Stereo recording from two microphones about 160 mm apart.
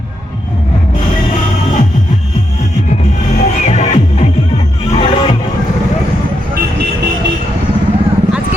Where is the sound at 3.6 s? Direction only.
45° left (ahead or behind).